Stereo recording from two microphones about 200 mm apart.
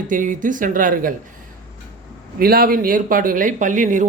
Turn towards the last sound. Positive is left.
turn(degrees=-40)  # may be behind; listen again after turning